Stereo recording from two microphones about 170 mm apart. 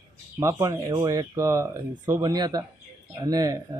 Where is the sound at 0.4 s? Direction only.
20° right (ahead or behind).